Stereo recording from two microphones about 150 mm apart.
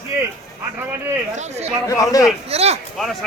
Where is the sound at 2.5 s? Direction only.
45° right (ahead or behind).